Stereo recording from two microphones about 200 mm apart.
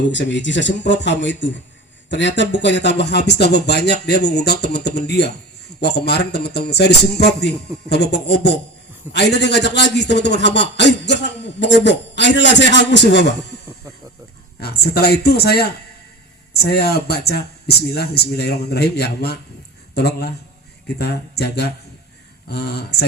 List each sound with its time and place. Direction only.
0.1 s speech: 65° left (ahead or behind)
14.6 s a man's voice: 50° left (ahead or behind)